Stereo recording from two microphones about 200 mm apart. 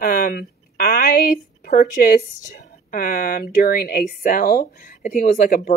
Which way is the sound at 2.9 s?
45° left (ahead or behind).